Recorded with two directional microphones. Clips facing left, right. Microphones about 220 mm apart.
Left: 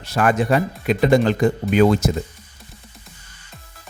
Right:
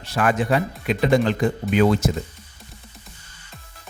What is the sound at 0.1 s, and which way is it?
Speech, 45° left (ahead or behind).